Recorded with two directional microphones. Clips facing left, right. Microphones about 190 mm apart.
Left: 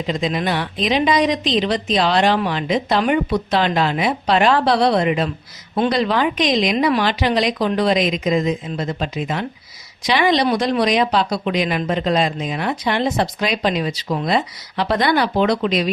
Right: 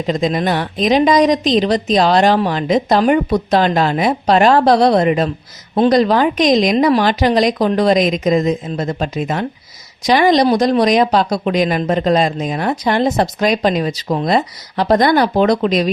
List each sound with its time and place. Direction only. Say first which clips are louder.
0.1 s speech: right 5 dB; 45° right (ahead or behind)